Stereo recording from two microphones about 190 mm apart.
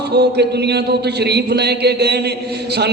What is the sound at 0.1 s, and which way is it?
A man's voice, 60° right (ahead or behind).